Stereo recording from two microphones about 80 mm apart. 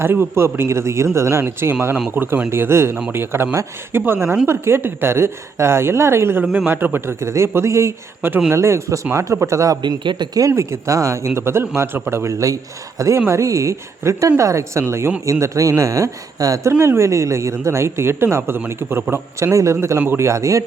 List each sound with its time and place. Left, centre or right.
0.0 s speech: right
9.8 s speech: right
10.5 s speech: right